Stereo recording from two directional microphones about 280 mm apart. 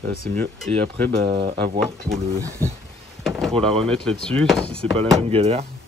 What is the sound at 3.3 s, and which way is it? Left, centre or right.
Speech, centre.